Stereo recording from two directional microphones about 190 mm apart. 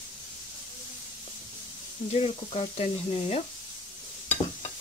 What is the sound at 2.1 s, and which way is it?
Speech, 30° left (ahead or behind).